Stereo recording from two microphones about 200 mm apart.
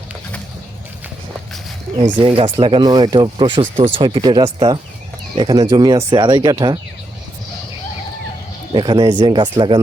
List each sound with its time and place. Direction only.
2.1 s speech: 25° right (ahead or behind)
8.7 s speech: 20° right (ahead or behind)